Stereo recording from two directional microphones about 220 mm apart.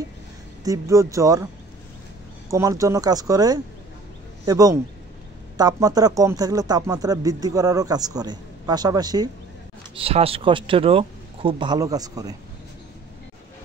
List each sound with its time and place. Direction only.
0.7 s speech: 15° right (ahead or behind)
2.5 s speech: 15° right (ahead or behind)